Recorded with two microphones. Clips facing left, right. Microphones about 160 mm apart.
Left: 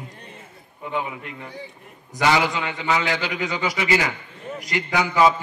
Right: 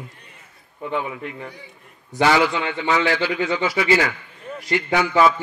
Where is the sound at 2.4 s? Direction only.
20° left (ahead or behind).